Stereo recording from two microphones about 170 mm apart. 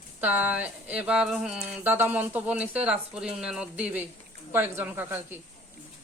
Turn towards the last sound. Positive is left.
turn(degrees=-10)  # may be behind; listen again after turning